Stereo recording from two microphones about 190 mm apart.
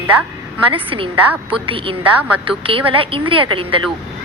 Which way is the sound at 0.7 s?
30° right (ahead or behind).